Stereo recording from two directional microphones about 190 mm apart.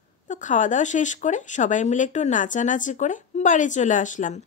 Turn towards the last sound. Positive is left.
turn(degrees=40)  # may be behind; listen again after turning